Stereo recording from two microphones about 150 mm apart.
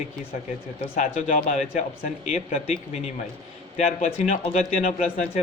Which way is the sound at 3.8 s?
50° left (ahead or behind).